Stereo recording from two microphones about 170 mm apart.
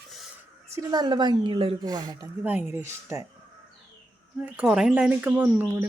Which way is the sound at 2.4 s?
10° right (ahead or behind).